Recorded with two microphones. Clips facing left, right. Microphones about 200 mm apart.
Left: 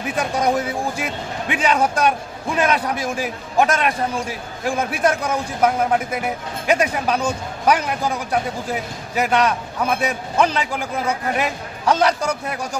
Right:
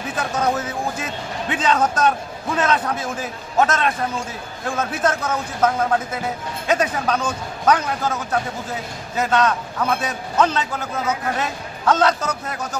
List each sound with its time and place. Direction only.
0.1 s speech: 15° left (ahead or behind)